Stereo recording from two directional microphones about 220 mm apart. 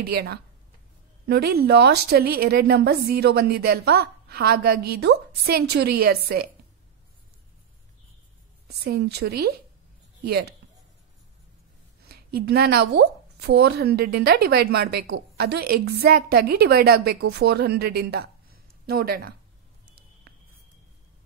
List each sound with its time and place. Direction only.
0.0 s speech: 45° right (ahead or behind)
8.6 s speech: 50° right (ahead or behind)
12.1 s speech: 45° right (ahead or behind)